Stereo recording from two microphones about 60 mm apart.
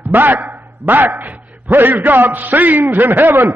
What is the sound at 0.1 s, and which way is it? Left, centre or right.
A man's voice, right.